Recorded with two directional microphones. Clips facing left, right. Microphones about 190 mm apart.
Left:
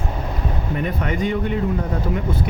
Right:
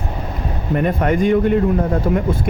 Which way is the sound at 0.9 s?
50° right (ahead or behind).